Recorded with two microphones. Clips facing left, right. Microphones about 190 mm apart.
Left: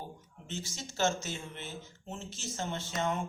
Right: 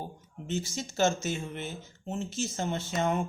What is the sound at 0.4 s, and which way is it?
Speech, 10° right (ahead or behind).